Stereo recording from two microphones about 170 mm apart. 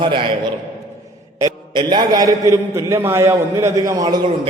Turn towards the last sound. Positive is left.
turn(degrees=-20)  # may be behind; listen again after turning